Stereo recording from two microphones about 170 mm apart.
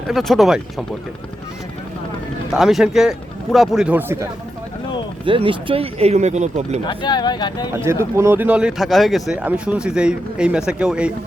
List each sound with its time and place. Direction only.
0.1 s speech: centre (ahead or behind)
2.5 s speech: centre (ahead or behind)
5.2 s speech: 30° right (ahead or behind)
6.8 s speech: 25° left (ahead or behind)
7.7 s speech: 15° right (ahead or behind)